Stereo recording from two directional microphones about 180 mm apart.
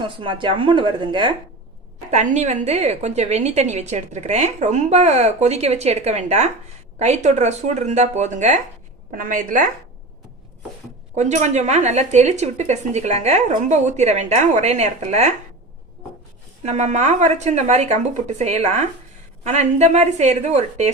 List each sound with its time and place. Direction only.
0.0 s speech: 25° right (ahead or behind)
2.0 s a woman's voice: 40° right (ahead or behind)
11.1 s a woman's voice: 40° right (ahead or behind)
16.6 s a woman's voice: 40° right (ahead or behind)